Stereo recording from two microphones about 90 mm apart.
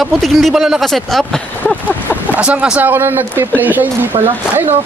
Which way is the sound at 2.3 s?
15° right (ahead or behind).